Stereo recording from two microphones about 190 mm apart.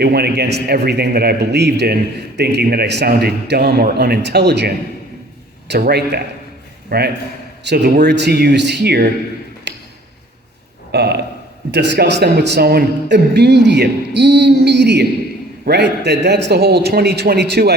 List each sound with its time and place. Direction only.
0.0 s a man's voice: 55° right (ahead or behind)
5.9 s a man's voice: 60° right (ahead or behind)
9.7 s tick-tock: 65° right (ahead or behind)
10.9 s a man's voice: 60° right (ahead or behind)